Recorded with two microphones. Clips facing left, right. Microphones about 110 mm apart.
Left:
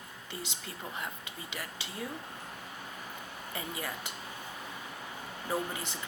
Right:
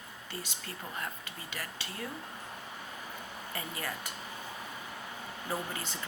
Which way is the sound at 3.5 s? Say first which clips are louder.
Left 1 dB; 15° left (ahead or behind).